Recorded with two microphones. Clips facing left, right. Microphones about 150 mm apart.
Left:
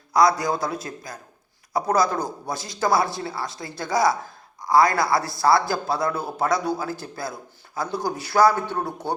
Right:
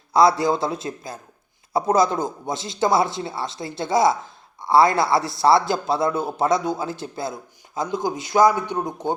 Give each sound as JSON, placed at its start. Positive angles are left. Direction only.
{"t": 0.1, "sound": "speech", "side_deg": -25}